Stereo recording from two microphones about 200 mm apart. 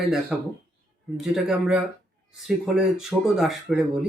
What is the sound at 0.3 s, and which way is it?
Speech, centre (ahead or behind).